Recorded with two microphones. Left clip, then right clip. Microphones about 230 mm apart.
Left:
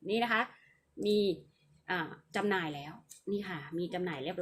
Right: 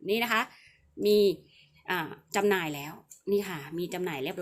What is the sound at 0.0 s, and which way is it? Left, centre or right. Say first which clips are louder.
Speech: right 3 dB; right.